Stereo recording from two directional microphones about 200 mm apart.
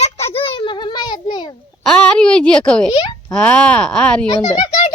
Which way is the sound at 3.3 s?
5° left (ahead or behind).